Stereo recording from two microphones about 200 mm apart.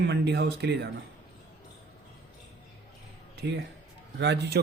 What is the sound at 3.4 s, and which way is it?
Speech, 60° right (ahead or behind).